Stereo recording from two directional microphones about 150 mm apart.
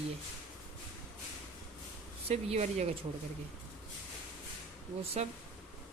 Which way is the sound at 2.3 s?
45° right (ahead or behind).